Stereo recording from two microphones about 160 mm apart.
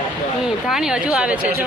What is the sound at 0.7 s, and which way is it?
Speech, 5° right (ahead or behind).